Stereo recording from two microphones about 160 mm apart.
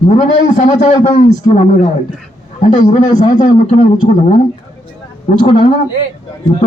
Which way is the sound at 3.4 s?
50° left (ahead or behind).